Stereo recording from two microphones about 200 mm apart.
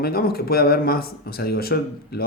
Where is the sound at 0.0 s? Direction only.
50° left (ahead or behind).